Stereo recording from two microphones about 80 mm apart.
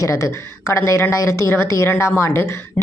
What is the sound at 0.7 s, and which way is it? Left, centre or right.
A woman's voice, left.